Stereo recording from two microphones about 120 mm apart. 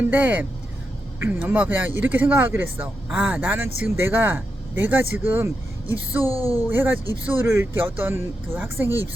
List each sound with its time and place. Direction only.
0.0 s speech: 15° right (ahead or behind)
6.2 s speech: 30° left (ahead or behind)
6.6 s speech: 15° right (ahead or behind)